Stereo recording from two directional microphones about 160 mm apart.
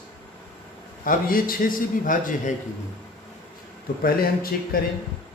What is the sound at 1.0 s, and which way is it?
A man's voice, 60° left (ahead or behind).